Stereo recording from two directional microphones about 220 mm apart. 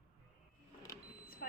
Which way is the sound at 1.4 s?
45° left (ahead or behind).